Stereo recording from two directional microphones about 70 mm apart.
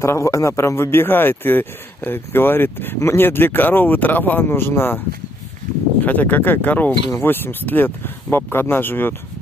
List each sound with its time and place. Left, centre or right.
0.0 s speech: left